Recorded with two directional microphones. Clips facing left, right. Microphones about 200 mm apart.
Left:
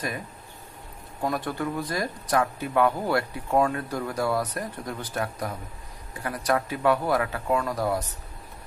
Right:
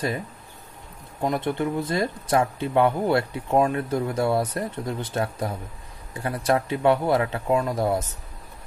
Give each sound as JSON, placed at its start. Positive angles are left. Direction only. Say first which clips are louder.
{"t": 1.2, "sound": "speech", "louder": "right 4 dB", "side_deg": -25}